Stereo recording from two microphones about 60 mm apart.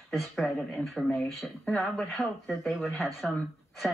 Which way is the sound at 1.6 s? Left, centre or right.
Centre.